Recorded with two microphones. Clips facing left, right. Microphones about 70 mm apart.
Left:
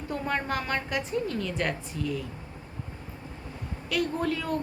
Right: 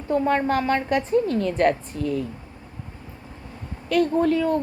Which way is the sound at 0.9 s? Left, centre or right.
Right.